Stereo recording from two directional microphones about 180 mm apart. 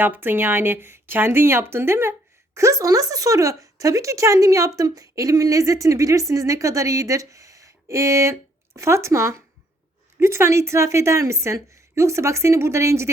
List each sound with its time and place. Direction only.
0.0 s a woman's voice: 10° right (ahead or behind)